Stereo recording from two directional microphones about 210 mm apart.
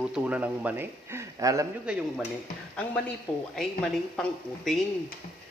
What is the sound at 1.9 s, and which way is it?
Speech, 5° right (ahead or behind).